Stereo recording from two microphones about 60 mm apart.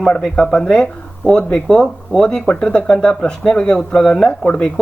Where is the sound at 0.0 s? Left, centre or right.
Centre.